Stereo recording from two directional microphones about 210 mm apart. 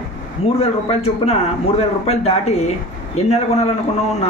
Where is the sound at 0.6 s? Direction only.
30° left (ahead or behind).